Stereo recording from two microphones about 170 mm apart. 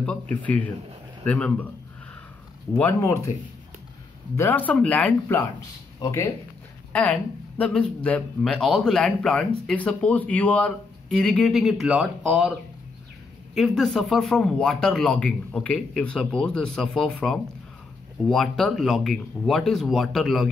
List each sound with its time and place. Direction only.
0.0 s speech: 5° left (ahead or behind)
2.7 s speech: 15° left (ahead or behind)
4.4 s speech: 10° left (ahead or behind)
13.6 s speech: centre (ahead or behind)